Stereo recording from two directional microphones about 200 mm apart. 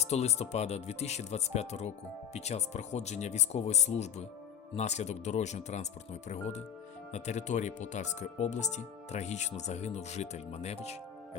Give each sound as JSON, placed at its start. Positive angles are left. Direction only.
{"t": 0.0, "sound": "speech", "side_deg": 35}